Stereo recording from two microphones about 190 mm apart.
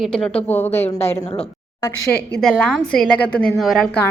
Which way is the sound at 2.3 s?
Centre (ahead or behind).